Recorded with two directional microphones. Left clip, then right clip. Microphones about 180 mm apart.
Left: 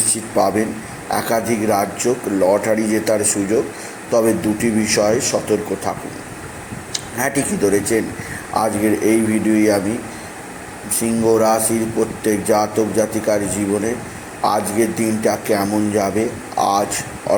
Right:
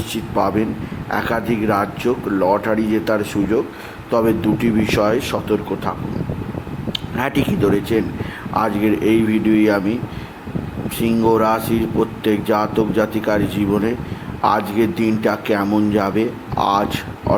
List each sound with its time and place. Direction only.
0.3 s speech: 10° right (ahead or behind)
7.2 s speech: 15° right (ahead or behind)
11.0 s speech: 15° right (ahead or behind)
14.4 s speech: 15° right (ahead or behind)